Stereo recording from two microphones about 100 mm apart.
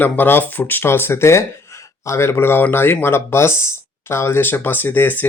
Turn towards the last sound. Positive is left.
turn(degrees=20)  # may be behind; listen again after turning